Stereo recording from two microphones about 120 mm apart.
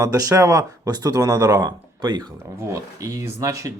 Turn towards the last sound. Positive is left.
turn(degrees=-25)  # may be behind; listen again after turning